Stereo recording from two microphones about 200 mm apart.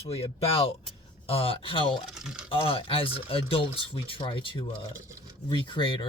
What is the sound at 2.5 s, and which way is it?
Speech, 25° left (ahead or behind).